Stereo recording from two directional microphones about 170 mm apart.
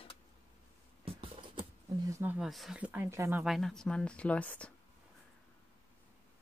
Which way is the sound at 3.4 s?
Centre (ahead or behind).